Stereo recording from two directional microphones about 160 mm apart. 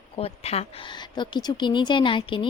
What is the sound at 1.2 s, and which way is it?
Speech, 30° left (ahead or behind).